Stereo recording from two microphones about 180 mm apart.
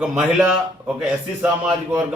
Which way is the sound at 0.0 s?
5° right (ahead or behind).